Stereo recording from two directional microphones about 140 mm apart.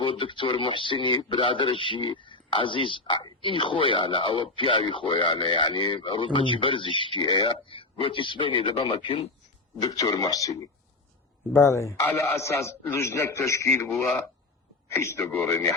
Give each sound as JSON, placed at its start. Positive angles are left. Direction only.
{"t": 0.0, "sound": "speech", "side_deg": 40}
{"t": 9.8, "sound": "a man's voice", "side_deg": 25}
{"t": 11.5, "sound": "a man's voice", "side_deg": 20}
{"t": 15.2, "sound": "speech", "side_deg": 0}
{"t": 15.4, "sound": "speech", "side_deg": 15}